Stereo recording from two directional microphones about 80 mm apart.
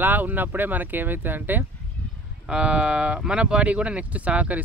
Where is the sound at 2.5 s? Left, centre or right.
Centre.